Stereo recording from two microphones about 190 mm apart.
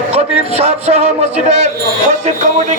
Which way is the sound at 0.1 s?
35° right (ahead or behind).